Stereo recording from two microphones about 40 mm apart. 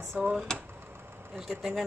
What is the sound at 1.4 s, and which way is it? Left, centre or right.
Speech, centre.